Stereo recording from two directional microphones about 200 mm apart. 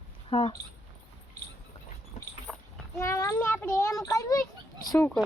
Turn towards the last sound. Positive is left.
turn(degrees=15)  # may be behind; listen again after turning